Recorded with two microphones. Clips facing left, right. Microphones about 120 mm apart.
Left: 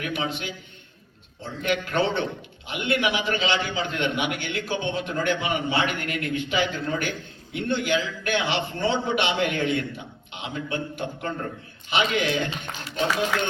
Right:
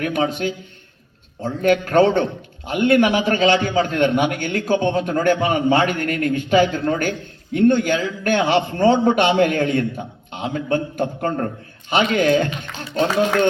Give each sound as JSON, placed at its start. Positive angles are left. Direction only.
{"t": 0.0, "sound": "a man's voice", "side_deg": -45}